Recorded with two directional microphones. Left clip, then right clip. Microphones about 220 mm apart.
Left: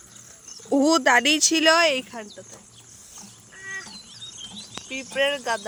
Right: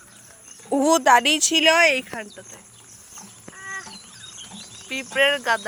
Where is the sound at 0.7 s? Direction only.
20° left (ahead or behind).